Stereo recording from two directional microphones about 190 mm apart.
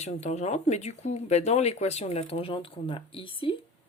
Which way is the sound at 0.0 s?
35° left (ahead or behind).